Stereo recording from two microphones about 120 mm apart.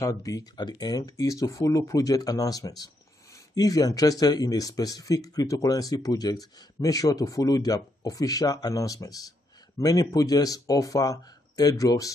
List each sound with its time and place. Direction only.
0.0 s speech: 30° left (ahead or behind)